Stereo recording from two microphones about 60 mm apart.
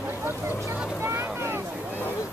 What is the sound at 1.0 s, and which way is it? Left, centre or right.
Boat, right.